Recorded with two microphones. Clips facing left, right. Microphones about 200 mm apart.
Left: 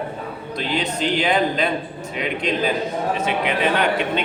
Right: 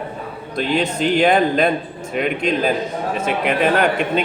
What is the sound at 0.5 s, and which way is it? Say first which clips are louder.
A man's voice: right 5 dB; 50° right (ahead or behind).